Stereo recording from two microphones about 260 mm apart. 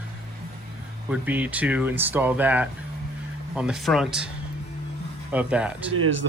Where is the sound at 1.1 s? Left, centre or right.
Centre.